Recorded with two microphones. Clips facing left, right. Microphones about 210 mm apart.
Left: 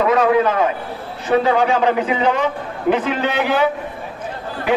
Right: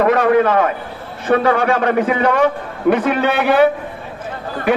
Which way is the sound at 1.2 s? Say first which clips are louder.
Right 1 dB; 55° right (ahead or behind).